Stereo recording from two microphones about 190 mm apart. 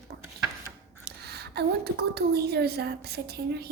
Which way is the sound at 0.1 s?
50° right (ahead or behind).